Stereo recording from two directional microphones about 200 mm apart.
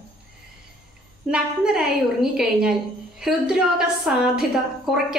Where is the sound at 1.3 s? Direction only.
5° right (ahead or behind).